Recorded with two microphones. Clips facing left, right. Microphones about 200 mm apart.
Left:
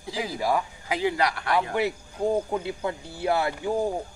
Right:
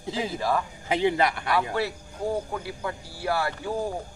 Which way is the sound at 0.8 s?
25° right (ahead or behind).